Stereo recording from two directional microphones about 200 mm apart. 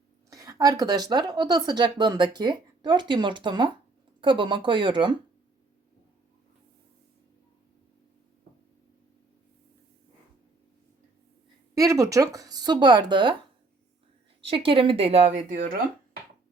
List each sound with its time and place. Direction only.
0.3 s speech: 15° right (ahead or behind)
11.7 s speech: 15° right (ahead or behind)
14.4 s speech: 25° right (ahead or behind)